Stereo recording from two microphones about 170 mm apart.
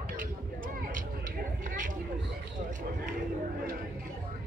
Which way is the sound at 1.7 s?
50° right (ahead or behind).